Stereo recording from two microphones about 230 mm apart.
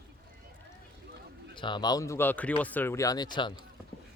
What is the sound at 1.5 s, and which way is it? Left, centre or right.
Speech, centre.